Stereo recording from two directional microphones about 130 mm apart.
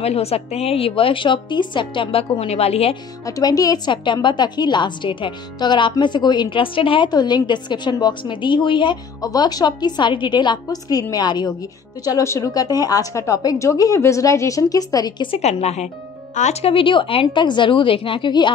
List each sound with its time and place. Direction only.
0.0 s a woman's voice: 50° left (ahead or behind)
3.3 s a woman's voice: 25° left (ahead or behind)
15.3 s speech: 55° left (ahead or behind)
16.7 s a woman's voice: 40° left (ahead or behind)